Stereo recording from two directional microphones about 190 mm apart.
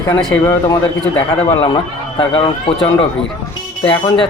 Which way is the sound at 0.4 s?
15° left (ahead or behind).